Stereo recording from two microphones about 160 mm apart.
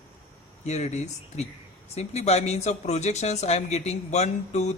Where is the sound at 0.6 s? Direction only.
45° left (ahead or behind).